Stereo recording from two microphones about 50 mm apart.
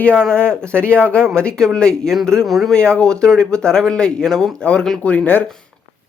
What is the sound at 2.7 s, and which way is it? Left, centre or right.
Speech, centre.